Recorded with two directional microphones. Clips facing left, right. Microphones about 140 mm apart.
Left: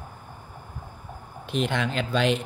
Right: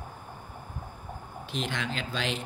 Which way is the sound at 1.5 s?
60° left (ahead or behind).